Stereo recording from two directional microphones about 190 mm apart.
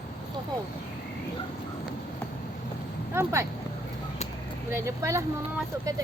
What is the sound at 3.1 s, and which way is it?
Speech, 15° right (ahead or behind).